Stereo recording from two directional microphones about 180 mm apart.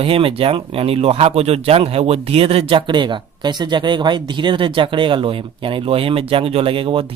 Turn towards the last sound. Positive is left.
turn(degrees=-30)  # may be behind; listen again after turning